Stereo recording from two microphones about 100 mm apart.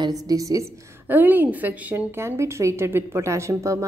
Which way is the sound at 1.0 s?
20° right (ahead or behind).